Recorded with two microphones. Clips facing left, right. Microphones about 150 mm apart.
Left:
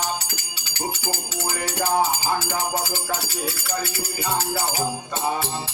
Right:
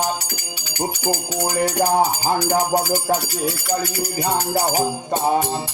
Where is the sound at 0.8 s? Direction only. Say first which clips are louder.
Right 6 dB; 40° right (ahead or behind).